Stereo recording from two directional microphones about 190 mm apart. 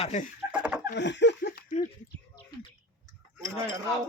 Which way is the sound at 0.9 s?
70° left (ahead or behind).